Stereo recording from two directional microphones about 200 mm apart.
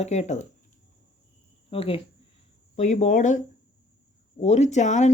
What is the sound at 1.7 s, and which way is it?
Speech, 30° left (ahead or behind).